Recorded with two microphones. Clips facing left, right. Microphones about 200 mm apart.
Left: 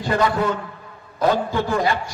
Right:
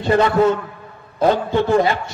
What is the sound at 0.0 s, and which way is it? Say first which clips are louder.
A man's voice: right 5 dB; 25° right (ahead or behind).